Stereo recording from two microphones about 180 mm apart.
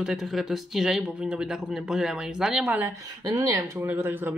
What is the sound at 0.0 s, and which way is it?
Speech, centre (ahead or behind).